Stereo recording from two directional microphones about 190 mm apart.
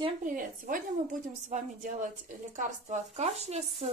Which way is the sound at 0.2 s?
45° right (ahead or behind).